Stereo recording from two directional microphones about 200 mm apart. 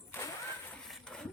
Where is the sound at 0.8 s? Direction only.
5° left (ahead or behind).